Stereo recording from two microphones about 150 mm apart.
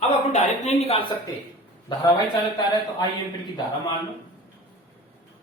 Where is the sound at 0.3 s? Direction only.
50° left (ahead or behind).